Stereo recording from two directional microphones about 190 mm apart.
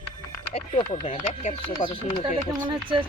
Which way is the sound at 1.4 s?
35° left (ahead or behind).